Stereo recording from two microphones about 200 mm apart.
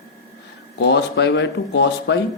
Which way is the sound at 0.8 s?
55° left (ahead or behind).